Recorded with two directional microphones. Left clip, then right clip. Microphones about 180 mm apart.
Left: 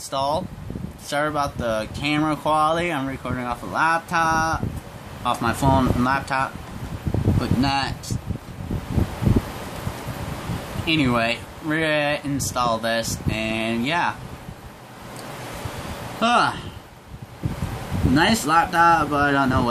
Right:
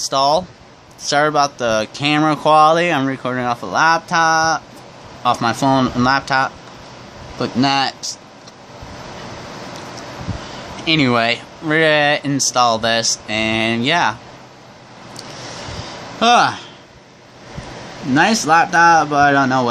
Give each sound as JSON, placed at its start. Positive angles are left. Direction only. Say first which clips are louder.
{"t": 0.1, "sound": "speech", "louder": "right 8 dB", "side_deg": -45}
{"t": 10.9, "sound": "speech", "louder": "right 6 dB", "side_deg": -45}
{"t": 16.2, "sound": "speech", "louder": "right 6 dB", "side_deg": -45}
{"t": 18.1, "sound": "speech", "louder": "right 5 dB", "side_deg": -45}